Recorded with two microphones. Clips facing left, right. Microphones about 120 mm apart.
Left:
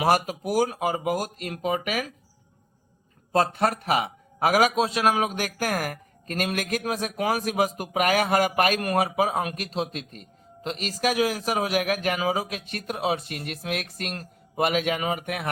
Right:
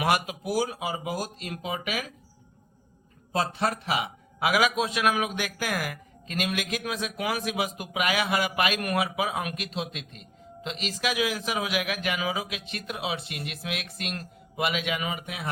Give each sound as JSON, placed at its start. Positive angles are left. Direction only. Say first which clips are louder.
{"t": 0.0, "sound": "a man's voice", "louder": "left 4 dB", "side_deg": 40}
{"t": 3.3, "sound": "a man's voice", "louder": "left 4 dB", "side_deg": 50}